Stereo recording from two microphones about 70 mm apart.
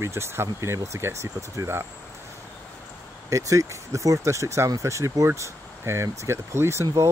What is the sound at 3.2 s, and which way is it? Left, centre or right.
Speech, right.